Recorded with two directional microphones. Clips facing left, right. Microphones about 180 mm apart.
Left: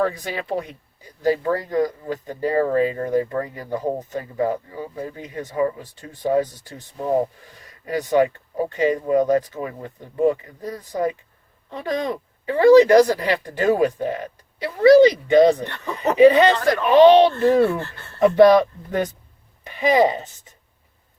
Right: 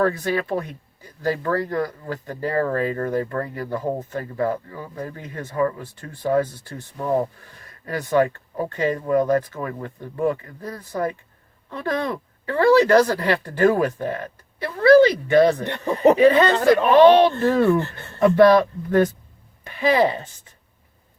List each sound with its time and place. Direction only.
0.0 s speech: 15° left (ahead or behind)